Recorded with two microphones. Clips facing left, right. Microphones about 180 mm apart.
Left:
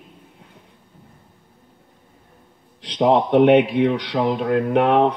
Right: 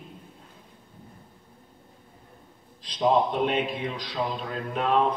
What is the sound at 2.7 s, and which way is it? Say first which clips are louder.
A man's voice: left 6 dB; 70° left (ahead or behind).